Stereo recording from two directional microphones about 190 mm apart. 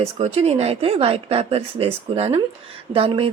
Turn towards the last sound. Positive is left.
turn(degrees=-30)  # may be behind; listen again after turning